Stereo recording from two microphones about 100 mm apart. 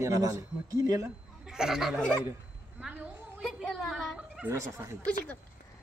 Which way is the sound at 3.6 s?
5° left (ahead or behind).